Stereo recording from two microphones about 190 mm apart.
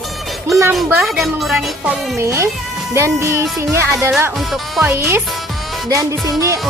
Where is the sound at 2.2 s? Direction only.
15° right (ahead or behind).